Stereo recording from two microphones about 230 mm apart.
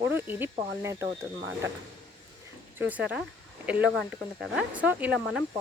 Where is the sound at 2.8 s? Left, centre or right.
Centre.